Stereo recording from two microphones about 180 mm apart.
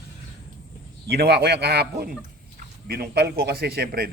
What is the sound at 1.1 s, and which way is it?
A man's voice, 65° right (ahead or behind).